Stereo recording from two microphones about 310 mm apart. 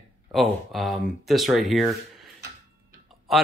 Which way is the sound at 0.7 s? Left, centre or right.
Centre.